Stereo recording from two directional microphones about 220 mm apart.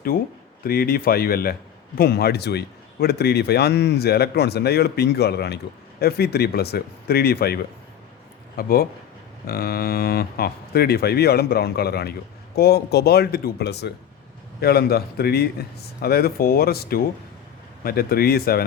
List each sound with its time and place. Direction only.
0.1 s a man's voice: 40° left (ahead or behind)